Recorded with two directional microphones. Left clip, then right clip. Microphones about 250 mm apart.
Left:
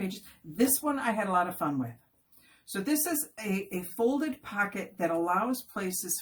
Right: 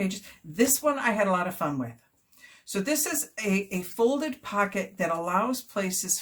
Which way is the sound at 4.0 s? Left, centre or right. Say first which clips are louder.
Right 4 dB; right.